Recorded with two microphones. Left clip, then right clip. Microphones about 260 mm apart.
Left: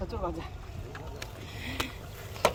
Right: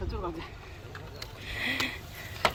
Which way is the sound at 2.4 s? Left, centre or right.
Left.